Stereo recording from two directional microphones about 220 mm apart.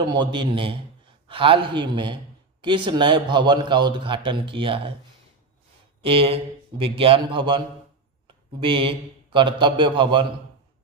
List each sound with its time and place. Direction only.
0.0 s a man's voice: 20° right (ahead or behind)
6.0 s a man's voice: 25° right (ahead or behind)